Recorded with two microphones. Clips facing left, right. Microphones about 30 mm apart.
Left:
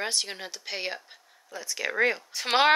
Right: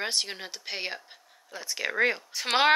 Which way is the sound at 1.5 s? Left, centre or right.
Centre.